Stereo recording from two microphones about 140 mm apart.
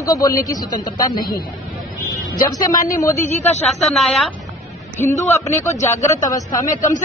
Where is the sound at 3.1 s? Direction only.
55° left (ahead or behind).